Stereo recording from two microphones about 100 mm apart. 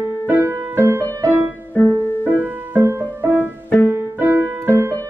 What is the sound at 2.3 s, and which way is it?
Music, 20° right (ahead or behind).